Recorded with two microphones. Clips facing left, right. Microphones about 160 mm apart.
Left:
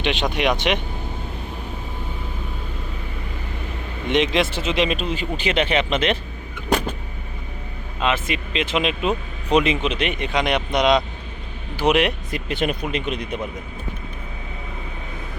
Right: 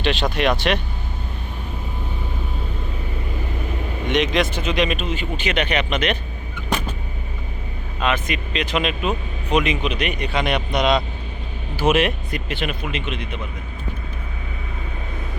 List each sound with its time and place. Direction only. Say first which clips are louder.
0.0 s speech: right 1 dB; 15° left (ahead or behind)
4.1 s speech: left 1 dB; 25° left (ahead or behind)
7.9 s speech: even; 25° left (ahead or behind)
12.5 s a man's voice: left 4 dB; 40° left (ahead or behind)